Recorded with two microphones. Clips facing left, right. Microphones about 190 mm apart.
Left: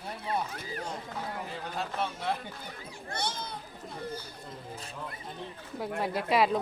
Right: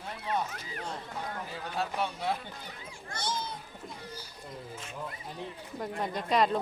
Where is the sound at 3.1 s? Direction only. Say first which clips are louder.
Even; 60° left (ahead or behind).